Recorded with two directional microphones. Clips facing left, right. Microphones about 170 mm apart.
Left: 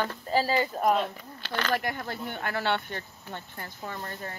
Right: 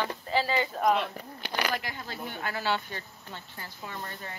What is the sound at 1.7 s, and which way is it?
Speech, 55° left (ahead or behind).